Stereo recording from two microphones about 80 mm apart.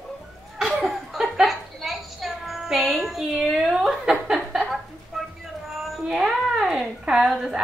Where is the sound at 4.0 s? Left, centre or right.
Centre.